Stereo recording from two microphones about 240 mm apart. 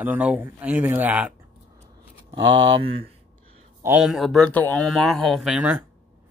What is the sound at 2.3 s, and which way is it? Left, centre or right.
Speech, right.